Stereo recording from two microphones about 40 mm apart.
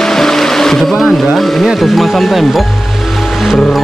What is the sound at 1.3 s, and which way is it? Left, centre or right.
Speech, centre.